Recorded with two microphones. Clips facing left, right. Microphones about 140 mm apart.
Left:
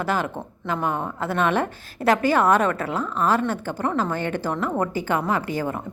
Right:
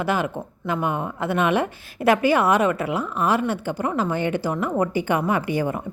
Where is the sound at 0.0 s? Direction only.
10° right (ahead or behind).